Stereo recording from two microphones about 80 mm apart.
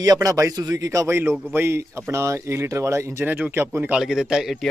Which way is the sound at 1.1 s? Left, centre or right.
Right.